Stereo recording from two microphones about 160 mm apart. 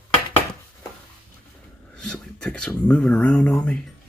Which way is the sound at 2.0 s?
5° left (ahead or behind).